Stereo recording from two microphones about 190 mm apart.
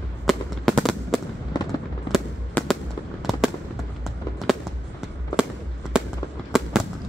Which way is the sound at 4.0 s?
Centre (ahead or behind).